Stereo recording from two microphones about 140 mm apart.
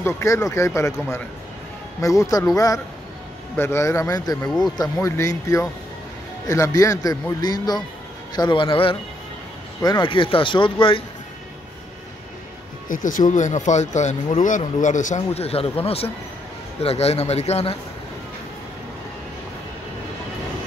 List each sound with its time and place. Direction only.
0.0 s a man's voice: 20° left (ahead or behind)
2.0 s a man's voice: 25° left (ahead or behind)
12.8 s speech: 70° left (ahead or behind); by 17.7 s 50° left (ahead or behind)